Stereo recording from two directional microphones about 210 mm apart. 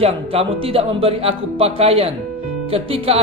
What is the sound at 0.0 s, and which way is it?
Speech, 25° right (ahead or behind).